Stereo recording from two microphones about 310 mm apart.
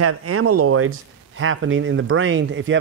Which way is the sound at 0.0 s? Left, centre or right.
Right.